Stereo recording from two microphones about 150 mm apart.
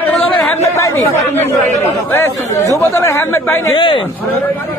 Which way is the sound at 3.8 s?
35° left (ahead or behind).